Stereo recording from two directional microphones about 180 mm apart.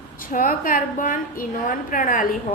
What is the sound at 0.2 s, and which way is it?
A woman's voice, 50° left (ahead or behind).